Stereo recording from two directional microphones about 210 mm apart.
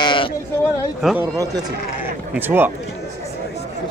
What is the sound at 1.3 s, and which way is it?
Speech, 15° right (ahead or behind).